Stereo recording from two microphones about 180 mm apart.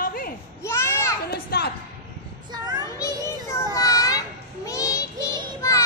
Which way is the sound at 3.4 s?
15° left (ahead or behind).